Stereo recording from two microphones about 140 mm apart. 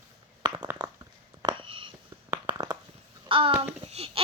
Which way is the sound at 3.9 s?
45° right (ahead or behind).